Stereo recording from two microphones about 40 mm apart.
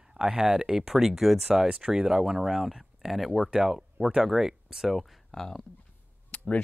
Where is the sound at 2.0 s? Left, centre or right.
Centre.